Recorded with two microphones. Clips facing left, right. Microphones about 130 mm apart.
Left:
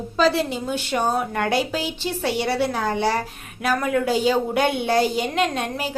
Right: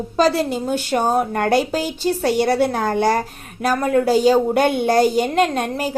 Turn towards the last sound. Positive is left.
turn(degrees=-45)  # may be behind; listen again after turning